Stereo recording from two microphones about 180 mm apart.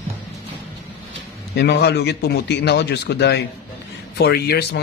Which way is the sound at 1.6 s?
65° left (ahead or behind).